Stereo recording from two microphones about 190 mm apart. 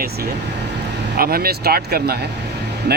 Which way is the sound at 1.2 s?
55° right (ahead or behind).